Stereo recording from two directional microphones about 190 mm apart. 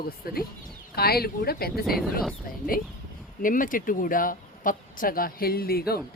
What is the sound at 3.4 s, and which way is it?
Speech, 45° left (ahead or behind).